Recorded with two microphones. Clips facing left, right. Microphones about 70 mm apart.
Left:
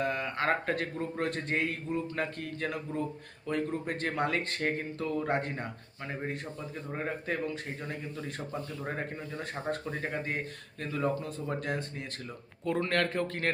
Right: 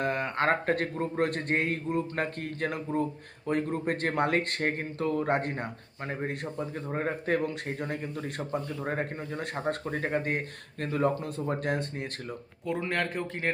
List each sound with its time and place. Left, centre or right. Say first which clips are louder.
0.0 s a man's voice: right 3 dB; right
12.6 s speech: left 1 dB; centre